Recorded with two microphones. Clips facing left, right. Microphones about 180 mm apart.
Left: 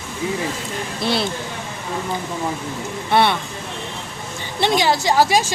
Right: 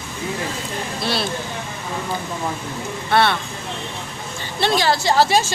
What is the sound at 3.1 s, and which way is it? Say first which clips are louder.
Speech: left 1 dB; 15° left (ahead or behind).